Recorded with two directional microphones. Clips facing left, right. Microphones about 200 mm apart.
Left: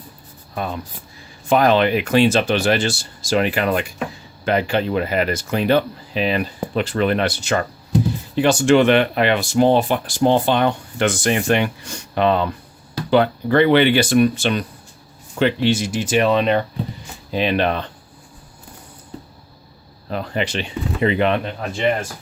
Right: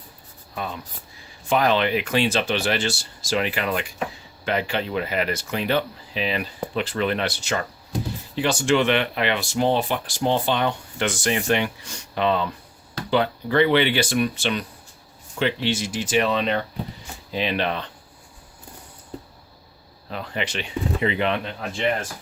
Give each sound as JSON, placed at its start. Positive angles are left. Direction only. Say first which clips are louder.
{"t": 0.5, "sound": "speech", "louder": "left 5 dB", "side_deg": 50}
{"t": 20.1, "sound": "speech", "louder": "left 6 dB", "side_deg": 40}
{"t": 21.0, "sound": "speech", "louder": "left 7 dB", "side_deg": 50}